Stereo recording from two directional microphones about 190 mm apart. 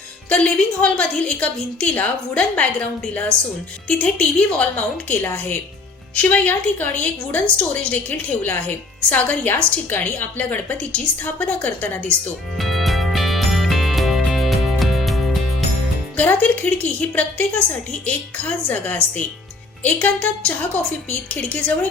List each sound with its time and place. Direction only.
0.3 s a woman's voice: 5° left (ahead or behind)
3.8 s a woman's voice: 5° left (ahead or behind)
12.5 s music: centre (ahead or behind)
16.1 s a woman's voice: 10° left (ahead or behind)